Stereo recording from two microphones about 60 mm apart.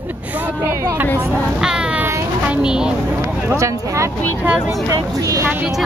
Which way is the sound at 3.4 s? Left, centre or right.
Right.